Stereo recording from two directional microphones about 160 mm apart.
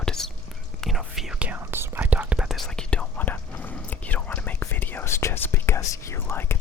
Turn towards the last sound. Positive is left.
turn(degrees=15)  # may be behind; listen again after turning